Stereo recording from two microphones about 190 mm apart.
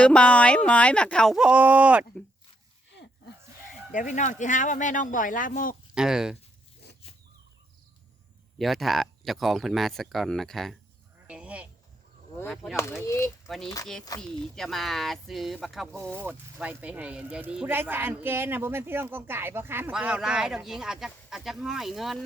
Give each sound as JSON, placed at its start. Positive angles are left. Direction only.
{"t": 0.0, "sound": "speech", "side_deg": 5}
{"t": 3.9, "sound": "speech", "side_deg": 40}
{"t": 5.9, "sound": "speech", "side_deg": -5}
{"t": 8.5, "sound": "speech", "side_deg": 0}
{"t": 11.3, "sound": "goat", "side_deg": -5}
{"t": 12.7, "sound": "speech", "side_deg": 15}
{"t": 13.5, "sound": "speech", "side_deg": 5}